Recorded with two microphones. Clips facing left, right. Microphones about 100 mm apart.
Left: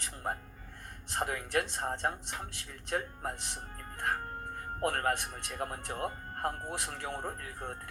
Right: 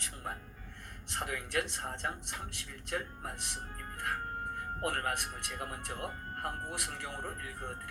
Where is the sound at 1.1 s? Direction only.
45° left (ahead or behind).